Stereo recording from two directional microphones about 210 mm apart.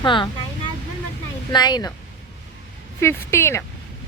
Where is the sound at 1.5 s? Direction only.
20° left (ahead or behind).